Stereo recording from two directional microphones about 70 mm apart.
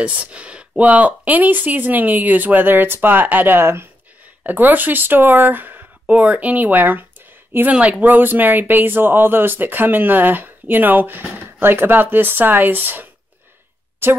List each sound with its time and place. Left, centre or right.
0.0 s speech: centre; by 3.9 s right
4.4 s speech: right
7.7 s speech: centre
8.0 s a woman's voice: right